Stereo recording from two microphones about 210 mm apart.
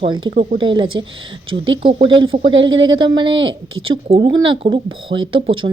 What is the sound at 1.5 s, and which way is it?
Speech, 65° right (ahead or behind).